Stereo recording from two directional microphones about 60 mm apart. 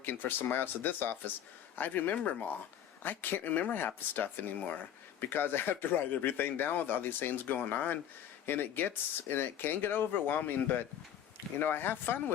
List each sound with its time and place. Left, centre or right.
0.0 s speech: left
3.0 s speech: left